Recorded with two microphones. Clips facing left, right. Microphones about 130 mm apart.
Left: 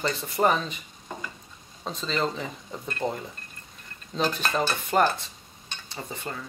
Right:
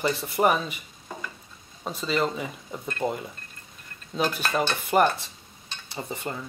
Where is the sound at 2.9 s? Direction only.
5° right (ahead or behind).